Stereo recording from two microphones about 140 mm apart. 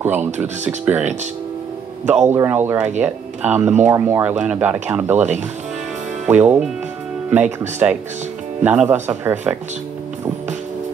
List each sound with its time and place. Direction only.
0.0 s speech: 15° right (ahead or behind)
2.0 s speech: 15° right (ahead or behind)
6.2 s speech: 10° right (ahead or behind)
7.8 s speech: 10° right (ahead or behind)